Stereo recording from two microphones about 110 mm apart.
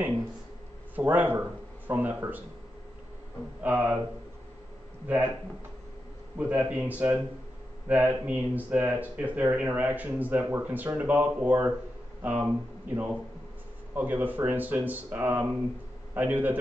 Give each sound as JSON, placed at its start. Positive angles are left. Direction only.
{"t": 0.9, "sound": "speech", "side_deg": -15}
{"t": 3.6, "sound": "speech", "side_deg": -15}
{"t": 5.0, "sound": "speech", "side_deg": -15}
{"t": 6.3, "sound": "a man's voice", "side_deg": -15}